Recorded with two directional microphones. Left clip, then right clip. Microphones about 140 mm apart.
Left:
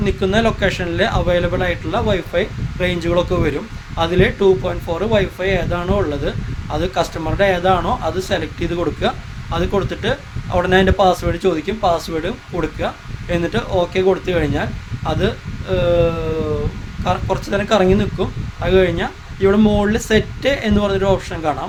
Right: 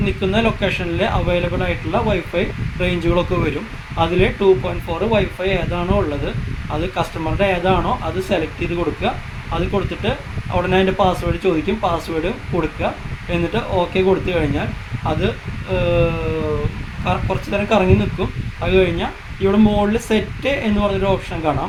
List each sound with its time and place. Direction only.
0.0 s speech: 50° left (ahead or behind)